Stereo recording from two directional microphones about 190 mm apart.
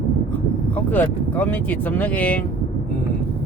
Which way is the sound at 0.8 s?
10° left (ahead or behind).